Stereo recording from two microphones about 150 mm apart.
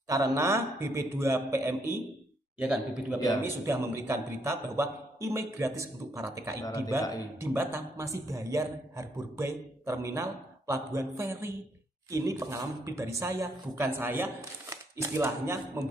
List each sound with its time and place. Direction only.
0.1 s a man's voice: 20° right (ahead or behind)
2.6 s a man's voice: 5° right (ahead or behind)
3.4 s a man's voice: 15° right (ahead or behind)
6.6 s a man's voice: 25° left (ahead or behind)
7.3 s a man's voice: 15° right (ahead or behind)